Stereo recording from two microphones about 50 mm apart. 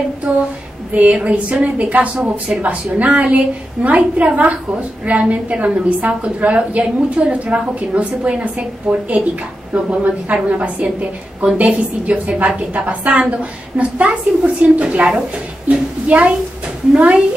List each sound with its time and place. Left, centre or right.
0.3 s a woman's voice: right